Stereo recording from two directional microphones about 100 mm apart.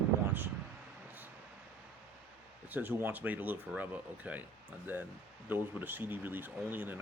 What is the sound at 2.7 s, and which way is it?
Speech, 15° right (ahead or behind).